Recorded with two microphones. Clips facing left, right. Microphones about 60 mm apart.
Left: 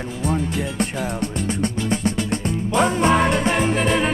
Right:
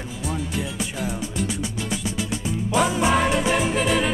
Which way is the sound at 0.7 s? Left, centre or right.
Left.